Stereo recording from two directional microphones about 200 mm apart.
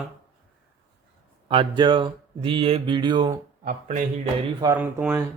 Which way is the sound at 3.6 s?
35° right (ahead or behind).